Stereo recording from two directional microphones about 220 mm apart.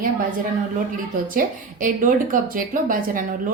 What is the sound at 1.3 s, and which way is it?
A woman's voice, 35° right (ahead or behind).